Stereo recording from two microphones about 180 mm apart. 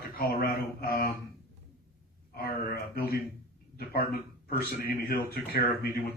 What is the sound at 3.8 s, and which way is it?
Speech, 60° left (ahead or behind).